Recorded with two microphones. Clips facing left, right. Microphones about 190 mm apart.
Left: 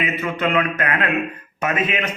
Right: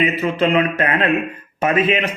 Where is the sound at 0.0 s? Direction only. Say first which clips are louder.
Right 5 dB; 30° right (ahead or behind).